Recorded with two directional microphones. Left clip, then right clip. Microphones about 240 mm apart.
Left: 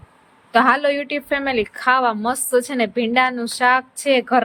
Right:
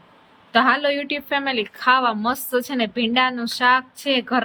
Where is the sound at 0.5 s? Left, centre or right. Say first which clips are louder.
Left 2 dB; centre.